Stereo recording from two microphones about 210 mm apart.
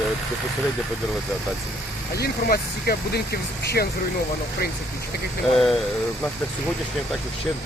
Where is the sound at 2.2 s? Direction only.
45° left (ahead or behind).